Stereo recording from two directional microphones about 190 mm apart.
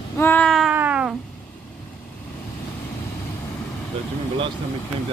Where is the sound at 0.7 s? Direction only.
5° right (ahead or behind).